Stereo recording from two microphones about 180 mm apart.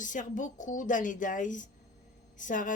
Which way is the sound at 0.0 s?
45° left (ahead or behind).